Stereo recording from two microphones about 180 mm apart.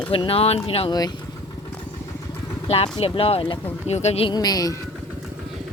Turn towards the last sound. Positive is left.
turn(degrees=20)  # may be behind; listen again after turning